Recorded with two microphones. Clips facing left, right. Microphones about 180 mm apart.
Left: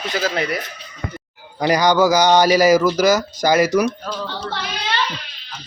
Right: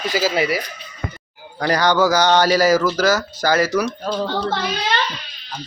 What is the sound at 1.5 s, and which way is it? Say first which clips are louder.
Speech: left 2 dB; 10° left (ahead or behind).